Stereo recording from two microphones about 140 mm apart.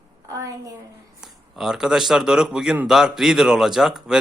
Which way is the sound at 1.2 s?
5° right (ahead or behind).